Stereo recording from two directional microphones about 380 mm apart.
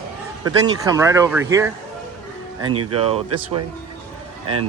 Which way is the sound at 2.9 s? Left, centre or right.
Centre.